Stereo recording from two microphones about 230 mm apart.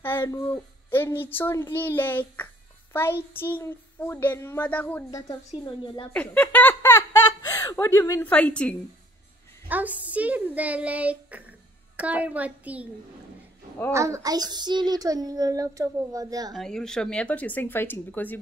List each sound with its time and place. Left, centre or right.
0.0 s a child's voice: centre
6.1 s speech: centre
9.7 s a child's voice: centre
13.9 s a child's voice: centre
16.5 s a child's voice: centre